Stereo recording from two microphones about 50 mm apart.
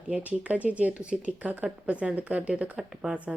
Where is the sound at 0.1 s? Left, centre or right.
Right.